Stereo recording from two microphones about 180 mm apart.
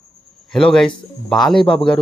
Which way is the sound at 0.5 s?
5° left (ahead or behind).